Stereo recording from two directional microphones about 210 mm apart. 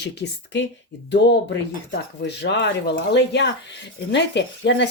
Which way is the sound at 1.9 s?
55° left (ahead or behind).